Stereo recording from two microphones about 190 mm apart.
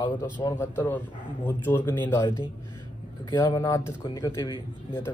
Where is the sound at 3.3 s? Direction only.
20° left (ahead or behind).